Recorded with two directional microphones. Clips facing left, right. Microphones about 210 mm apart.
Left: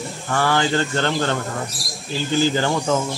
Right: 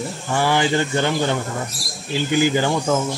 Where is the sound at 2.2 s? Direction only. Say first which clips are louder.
Right 1 dB; 15° right (ahead or behind).